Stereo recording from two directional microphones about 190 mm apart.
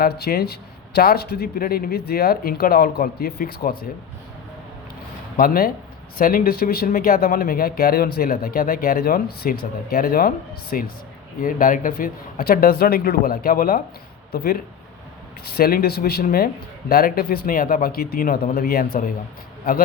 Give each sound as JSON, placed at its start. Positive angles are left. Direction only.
{"t": 0.0, "sound": "speech", "side_deg": 55}
{"t": 5.4, "sound": "speech", "side_deg": 50}